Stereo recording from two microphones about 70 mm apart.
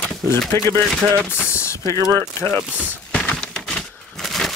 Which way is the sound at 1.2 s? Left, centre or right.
Left.